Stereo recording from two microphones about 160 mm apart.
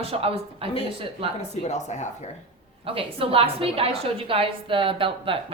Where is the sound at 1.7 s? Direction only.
45° left (ahead or behind).